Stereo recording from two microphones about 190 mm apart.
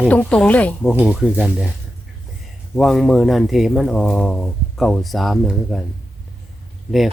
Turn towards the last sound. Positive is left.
turn(degrees=0)  # may be behind; listen again after turning